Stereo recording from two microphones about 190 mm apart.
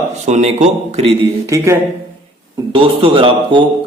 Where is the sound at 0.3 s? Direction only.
35° right (ahead or behind).